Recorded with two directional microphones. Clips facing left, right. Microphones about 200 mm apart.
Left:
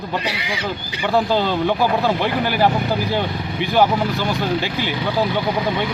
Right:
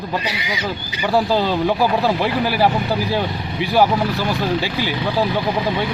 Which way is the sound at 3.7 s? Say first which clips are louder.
Right 1 dB; 5° right (ahead or behind).